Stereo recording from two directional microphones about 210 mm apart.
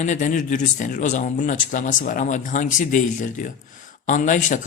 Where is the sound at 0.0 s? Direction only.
35° left (ahead or behind).